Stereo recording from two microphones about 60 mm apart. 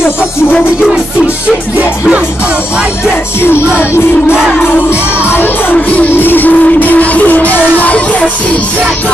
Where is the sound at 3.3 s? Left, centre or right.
Left.